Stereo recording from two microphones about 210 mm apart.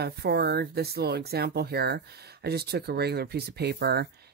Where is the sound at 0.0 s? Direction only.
50° right (ahead or behind).